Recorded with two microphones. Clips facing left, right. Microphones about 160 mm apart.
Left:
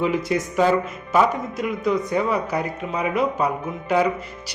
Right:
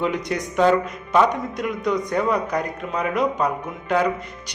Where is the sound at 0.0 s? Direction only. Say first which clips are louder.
Left 2 dB; 5° left (ahead or behind).